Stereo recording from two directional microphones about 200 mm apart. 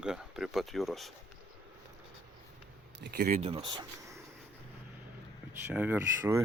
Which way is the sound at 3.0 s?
50° right (ahead or behind).